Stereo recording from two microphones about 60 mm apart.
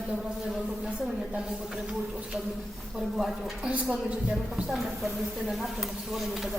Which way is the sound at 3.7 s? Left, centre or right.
Centre.